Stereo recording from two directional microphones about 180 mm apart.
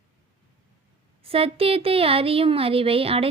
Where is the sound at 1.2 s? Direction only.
30° right (ahead or behind).